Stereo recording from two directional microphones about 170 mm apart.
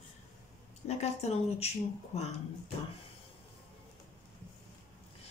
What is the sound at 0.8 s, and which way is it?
Speech, 40° left (ahead or behind).